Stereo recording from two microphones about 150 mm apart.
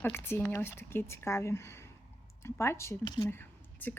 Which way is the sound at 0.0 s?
15° left (ahead or behind).